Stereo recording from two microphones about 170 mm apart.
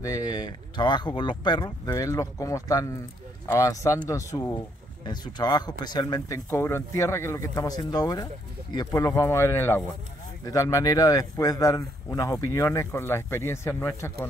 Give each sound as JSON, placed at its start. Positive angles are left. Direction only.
{"t": 0.0, "sound": "speech", "side_deg": 20}